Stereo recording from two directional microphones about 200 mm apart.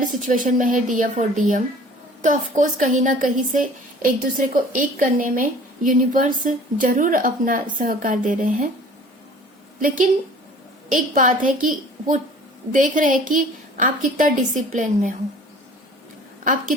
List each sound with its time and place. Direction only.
0.0 s a woman's voice: 40° right (ahead or behind)
9.8 s a woman's voice: 40° right (ahead or behind)
16.4 s a woman's voice: 40° right (ahead or behind)